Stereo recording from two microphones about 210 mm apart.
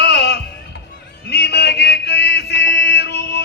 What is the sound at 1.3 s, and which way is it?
Music, 55° left (ahead or behind).